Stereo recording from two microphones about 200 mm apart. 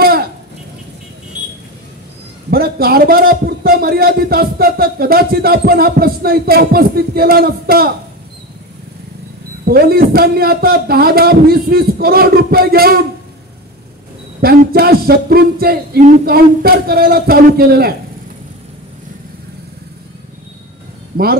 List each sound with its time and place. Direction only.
2.5 s a man's voice: 50° right (ahead or behind)
9.7 s a man's voice: 50° right (ahead or behind)
14.4 s a man's voice: 50° right (ahead or behind)